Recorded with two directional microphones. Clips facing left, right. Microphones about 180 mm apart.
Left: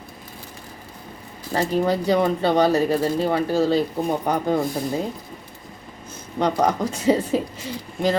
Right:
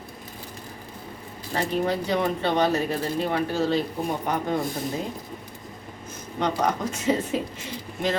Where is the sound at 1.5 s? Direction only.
35° left (ahead or behind).